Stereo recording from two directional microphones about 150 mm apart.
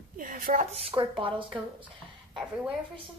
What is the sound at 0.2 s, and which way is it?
Speech, 70° right (ahead or behind).